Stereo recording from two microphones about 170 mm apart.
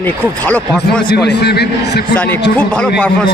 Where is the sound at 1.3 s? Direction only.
75° left (ahead or behind).